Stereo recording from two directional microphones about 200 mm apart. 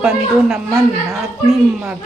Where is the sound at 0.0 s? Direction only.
5° right (ahead or behind).